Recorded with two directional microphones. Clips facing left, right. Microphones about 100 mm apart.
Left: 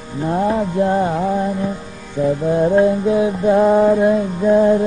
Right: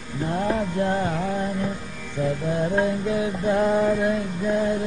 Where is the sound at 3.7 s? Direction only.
30° left (ahead or behind).